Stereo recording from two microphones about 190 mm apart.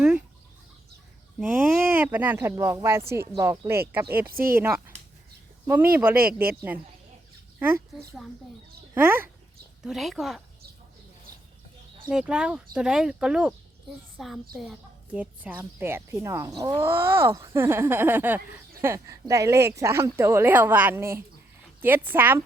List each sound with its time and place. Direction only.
1.4 s a woman's voice: 5° right (ahead or behind)
4.3 s speech: 50° right (ahead or behind)
5.6 s a woman's voice: 10° right (ahead or behind)
7.9 s speech: centre (ahead or behind)
9.0 s a woman's voice: 10° right (ahead or behind)
9.8 s speech: centre (ahead or behind)
12.1 s a woman's voice: 5° right (ahead or behind)